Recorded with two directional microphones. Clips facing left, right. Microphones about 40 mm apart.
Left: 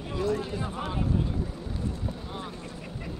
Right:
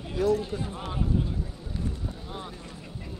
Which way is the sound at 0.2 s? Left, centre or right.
Left.